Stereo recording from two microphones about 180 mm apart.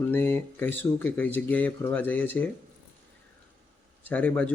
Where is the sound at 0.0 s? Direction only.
10° left (ahead or behind).